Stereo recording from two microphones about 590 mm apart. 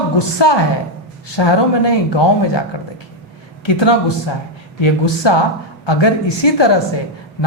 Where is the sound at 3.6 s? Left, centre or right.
Left.